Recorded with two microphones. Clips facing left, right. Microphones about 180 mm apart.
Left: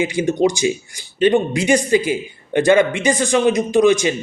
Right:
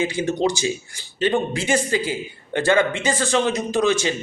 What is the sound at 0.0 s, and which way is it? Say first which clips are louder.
Speech: left 4 dB; 15° left (ahead or behind).